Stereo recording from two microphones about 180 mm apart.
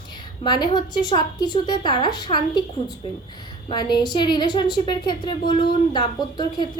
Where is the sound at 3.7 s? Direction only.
25° left (ahead or behind).